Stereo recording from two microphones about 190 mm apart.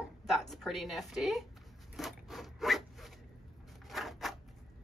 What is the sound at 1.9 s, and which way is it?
Zipper, centre (ahead or behind).